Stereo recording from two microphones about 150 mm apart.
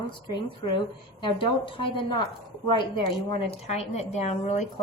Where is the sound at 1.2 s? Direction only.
35° left (ahead or behind).